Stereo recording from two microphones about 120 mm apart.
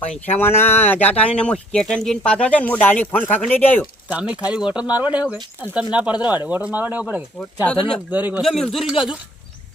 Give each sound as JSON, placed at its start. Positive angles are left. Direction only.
{"t": 0.3, "sound": "speech", "side_deg": 20}
{"t": 4.1, "sound": "speech", "side_deg": -10}
{"t": 7.7, "sound": "speech", "side_deg": 5}
{"t": 8.1, "sound": "speech", "side_deg": -15}
{"t": 8.4, "sound": "speech", "side_deg": 0}